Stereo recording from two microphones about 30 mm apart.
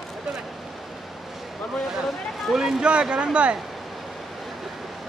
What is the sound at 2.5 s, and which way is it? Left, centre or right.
Speech, centre.